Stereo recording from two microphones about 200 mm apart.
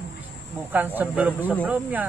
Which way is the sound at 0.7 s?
10° right (ahead or behind).